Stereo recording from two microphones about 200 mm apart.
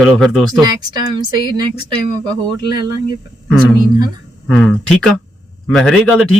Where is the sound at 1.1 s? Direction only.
20° right (ahead or behind).